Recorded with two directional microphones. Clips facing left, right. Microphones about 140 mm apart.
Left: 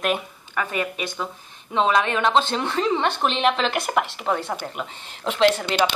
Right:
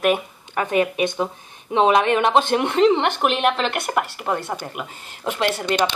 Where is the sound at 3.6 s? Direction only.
Centre (ahead or behind).